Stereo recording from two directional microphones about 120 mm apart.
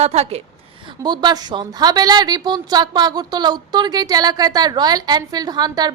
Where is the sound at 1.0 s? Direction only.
35° right (ahead or behind).